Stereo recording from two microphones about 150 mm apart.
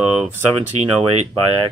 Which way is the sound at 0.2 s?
15° right (ahead or behind).